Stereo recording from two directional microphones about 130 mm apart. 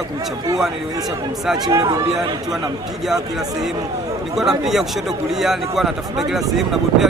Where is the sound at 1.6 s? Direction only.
25° right (ahead or behind).